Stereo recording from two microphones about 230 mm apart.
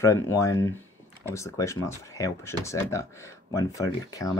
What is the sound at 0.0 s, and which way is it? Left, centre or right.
Speech, centre.